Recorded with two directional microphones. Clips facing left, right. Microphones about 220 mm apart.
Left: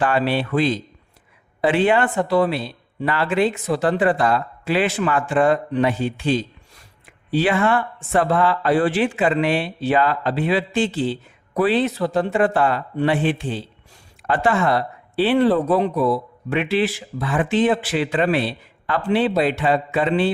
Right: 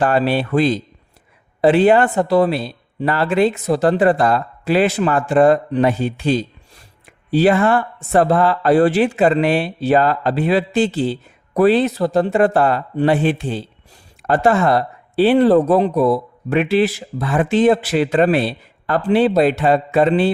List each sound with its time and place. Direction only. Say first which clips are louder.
0.0 s speech: right 3 dB; 40° right (ahead or behind)